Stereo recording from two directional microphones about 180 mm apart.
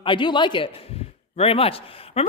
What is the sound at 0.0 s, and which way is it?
A man's voice, 25° left (ahead or behind).